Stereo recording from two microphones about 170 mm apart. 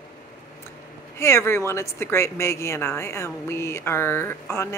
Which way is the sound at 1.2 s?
15° left (ahead or behind).